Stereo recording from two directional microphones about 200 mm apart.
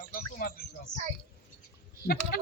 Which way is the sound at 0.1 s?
45° left (ahead or behind).